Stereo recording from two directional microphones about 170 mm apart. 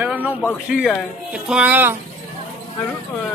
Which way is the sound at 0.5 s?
5° right (ahead or behind).